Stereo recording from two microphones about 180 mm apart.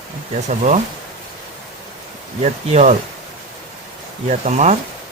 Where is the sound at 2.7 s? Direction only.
40° right (ahead or behind).